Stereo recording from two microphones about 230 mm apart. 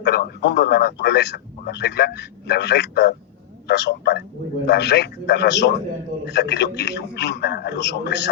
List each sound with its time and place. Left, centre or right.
0.0 s a man's voice: left